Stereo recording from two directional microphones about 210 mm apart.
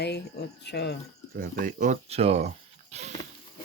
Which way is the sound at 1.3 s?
40° right (ahead or behind).